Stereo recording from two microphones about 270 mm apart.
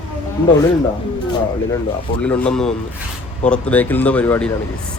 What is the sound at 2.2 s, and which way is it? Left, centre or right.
Speech, centre.